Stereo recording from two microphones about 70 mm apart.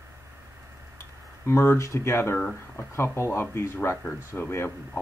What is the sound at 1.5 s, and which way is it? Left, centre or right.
Speech, left.